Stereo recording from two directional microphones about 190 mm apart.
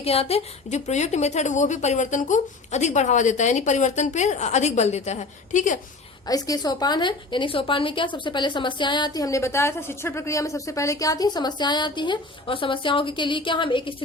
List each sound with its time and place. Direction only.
0.0 s a woman's voice: 30° left (ahead or behind)
6.2 s a woman's voice: 20° left (ahead or behind)